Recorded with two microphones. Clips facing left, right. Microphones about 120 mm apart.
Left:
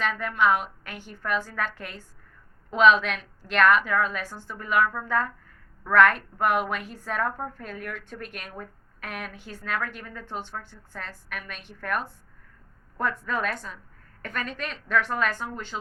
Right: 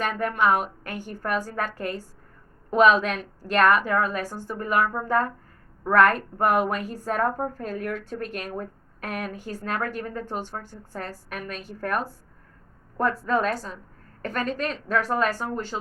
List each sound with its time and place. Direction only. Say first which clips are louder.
0.0 s a woman's voice: right 1 dB; 45° right (ahead or behind)